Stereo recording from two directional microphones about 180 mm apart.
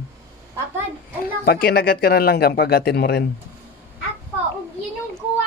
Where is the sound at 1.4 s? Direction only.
60° left (ahead or behind).